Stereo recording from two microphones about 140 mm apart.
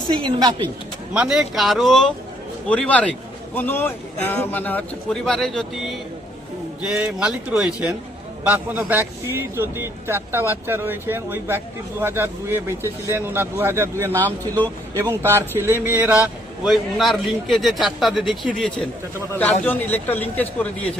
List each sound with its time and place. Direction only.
0.1 s a woman's voice: 35° right (ahead or behind)
1.1 s a man's voice: 5° right (ahead or behind)
16.6 s a man's voice: centre (ahead or behind)
19.4 s a man's voice: 10° left (ahead or behind)